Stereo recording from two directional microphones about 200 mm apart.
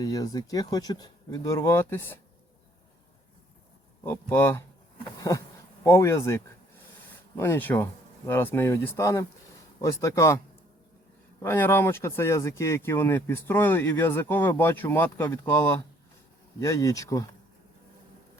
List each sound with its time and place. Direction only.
0.0 s speech: 20° left (ahead or behind)
4.0 s speech: 10° left (ahead or behind)
5.8 s speech: 15° left (ahead or behind)
11.4 s speech: 10° left (ahead or behind)